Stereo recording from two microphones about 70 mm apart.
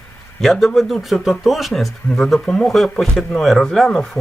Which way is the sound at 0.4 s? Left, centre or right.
Centre.